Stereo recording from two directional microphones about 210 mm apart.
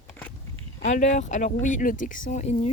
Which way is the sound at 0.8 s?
35° left (ahead or behind).